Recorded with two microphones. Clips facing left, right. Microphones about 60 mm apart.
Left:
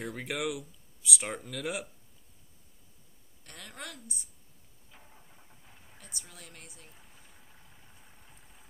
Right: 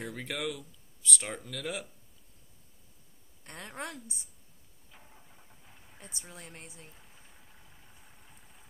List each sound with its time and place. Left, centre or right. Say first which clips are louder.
0.0 s speech: left 2 dB; centre
3.4 s a woman's voice: right 4 dB; right
4.9 s vehicle: even; centre
5.9 s speech: right 3 dB; right
6.9 s a sound: even; centre